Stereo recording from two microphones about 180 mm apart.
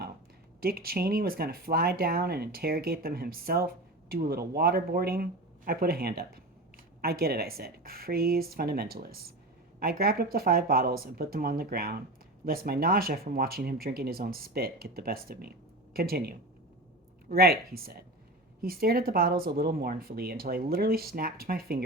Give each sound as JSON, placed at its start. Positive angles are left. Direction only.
{"t": 0.6, "sound": "speech", "side_deg": -55}